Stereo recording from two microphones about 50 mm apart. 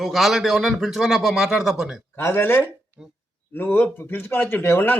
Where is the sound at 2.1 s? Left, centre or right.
Left.